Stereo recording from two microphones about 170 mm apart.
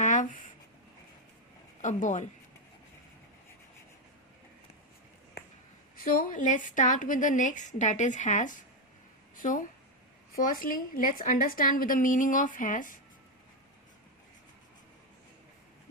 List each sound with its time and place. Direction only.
0.0 s writing: 45° left (ahead or behind)
1.8 s speech: 45° left (ahead or behind)
6.0 s a woman's voice: 55° left (ahead or behind)